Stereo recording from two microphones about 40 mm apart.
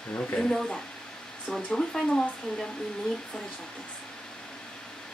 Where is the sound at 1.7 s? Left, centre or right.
Centre.